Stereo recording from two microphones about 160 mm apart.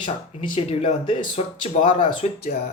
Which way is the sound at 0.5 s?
35° left (ahead or behind).